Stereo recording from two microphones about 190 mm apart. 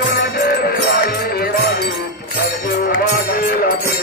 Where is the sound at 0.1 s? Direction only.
55° left (ahead or behind).